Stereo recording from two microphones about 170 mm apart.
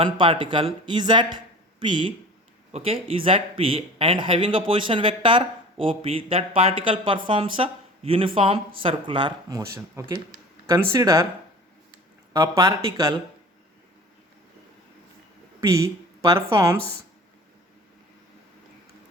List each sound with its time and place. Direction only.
0.0 s speech: 30° right (ahead or behind)
12.3 s speech: 20° right (ahead or behind)
15.6 s speech: 20° right (ahead or behind)